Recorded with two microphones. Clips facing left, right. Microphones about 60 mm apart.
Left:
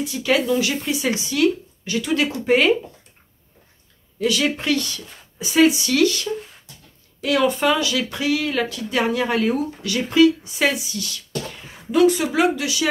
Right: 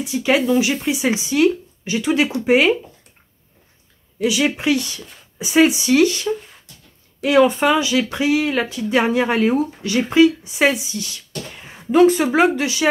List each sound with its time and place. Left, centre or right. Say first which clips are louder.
0.0 s speech: right 2 dB; centre
2.4 s speech: right 2 dB; centre
4.2 s a woman's voice: right 2 dB; centre; by 12.8 s right